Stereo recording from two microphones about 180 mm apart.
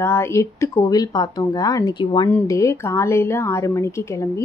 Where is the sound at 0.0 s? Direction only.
15° left (ahead or behind).